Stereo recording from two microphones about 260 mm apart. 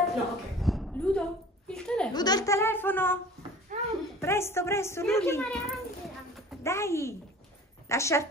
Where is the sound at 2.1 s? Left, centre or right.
Centre.